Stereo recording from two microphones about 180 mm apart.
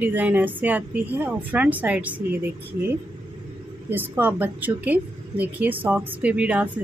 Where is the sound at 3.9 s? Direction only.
10° right (ahead or behind).